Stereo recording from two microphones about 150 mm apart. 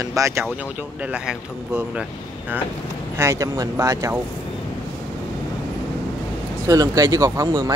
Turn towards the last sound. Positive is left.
turn(degrees=-20)  # may be behind; listen again after turning